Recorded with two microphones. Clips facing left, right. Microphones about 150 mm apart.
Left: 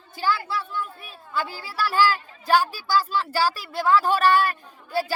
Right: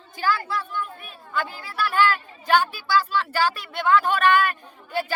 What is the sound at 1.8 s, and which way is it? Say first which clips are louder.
Speech: even; 30° left (ahead or behind).